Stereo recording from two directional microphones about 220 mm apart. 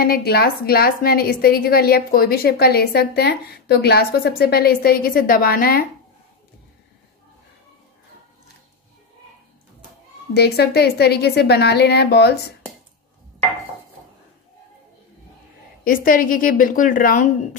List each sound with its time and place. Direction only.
0.0 s a woman's voice: 45° left (ahead or behind)
10.3 s a woman's voice: 45° left (ahead or behind)
15.8 s a woman's voice: 40° left (ahead or behind)